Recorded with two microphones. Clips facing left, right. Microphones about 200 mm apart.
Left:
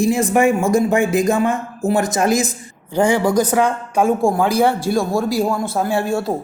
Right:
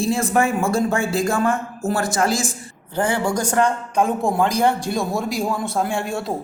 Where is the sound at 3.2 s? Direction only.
10° right (ahead or behind).